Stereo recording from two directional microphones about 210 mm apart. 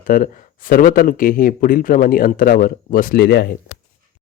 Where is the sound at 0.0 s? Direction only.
40° left (ahead or behind).